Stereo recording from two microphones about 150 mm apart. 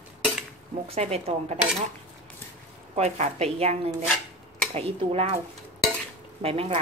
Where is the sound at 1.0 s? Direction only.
45° right (ahead or behind).